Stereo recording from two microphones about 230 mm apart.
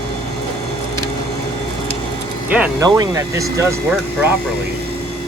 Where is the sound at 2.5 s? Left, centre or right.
Centre.